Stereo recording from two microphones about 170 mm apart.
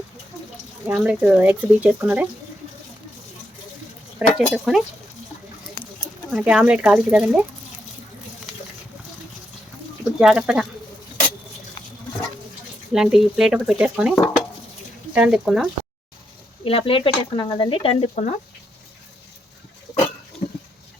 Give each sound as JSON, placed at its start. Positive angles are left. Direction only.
{"t": 0.9, "sound": "speech", "side_deg": -5}
{"t": 4.2, "sound": "speech", "side_deg": -5}
{"t": 6.3, "sound": "speech", "side_deg": -5}
{"t": 10.2, "sound": "speech", "side_deg": -5}
{"t": 12.9, "sound": "speech", "side_deg": -5}
{"t": 16.6, "sound": "speech", "side_deg": 35}
{"t": 18.1, "sound": "speech", "side_deg": 45}